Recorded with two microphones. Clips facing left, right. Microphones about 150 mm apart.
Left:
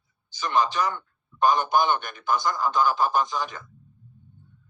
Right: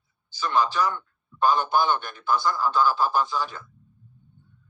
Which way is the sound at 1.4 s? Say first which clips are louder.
Left 1 dB; 15° left (ahead or behind).